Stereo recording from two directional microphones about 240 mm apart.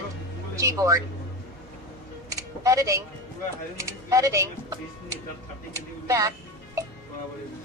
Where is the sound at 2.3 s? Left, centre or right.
Centre.